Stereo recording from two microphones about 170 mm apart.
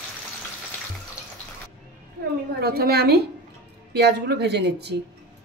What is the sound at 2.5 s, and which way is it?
Speech, 65° right (ahead or behind).